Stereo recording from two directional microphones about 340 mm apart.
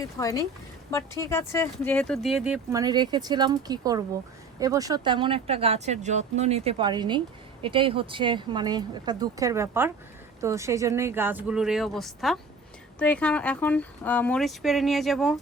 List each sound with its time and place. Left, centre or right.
0.2 s speech: centre